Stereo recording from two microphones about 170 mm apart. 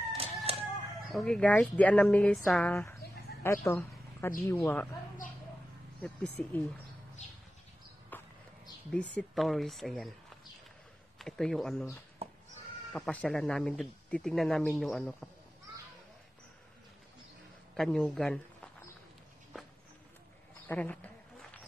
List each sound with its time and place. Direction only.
0.2 s chicken: 35° right (ahead or behind)
1.1 s speech: 5° left (ahead or behind)
2.7 s a woman's voice: 15° left (ahead or behind)
5.9 s speech: 10° left (ahead or behind)
8.1 s basketball bounce: 10° left (ahead or behind)
8.9 s speech: 5° left (ahead or behind)
11.1 s speech: 5° left (ahead or behind)
12.9 s speech: 5° left (ahead or behind)
17.7 s speech: 5° left (ahead or behind)
20.6 s a sound: 10° left (ahead or behind)